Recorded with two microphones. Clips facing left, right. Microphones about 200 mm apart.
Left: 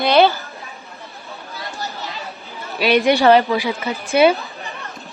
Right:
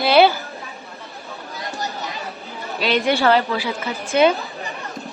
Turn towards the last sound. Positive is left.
turn(degrees=-15)  # may be behind; listen again after turning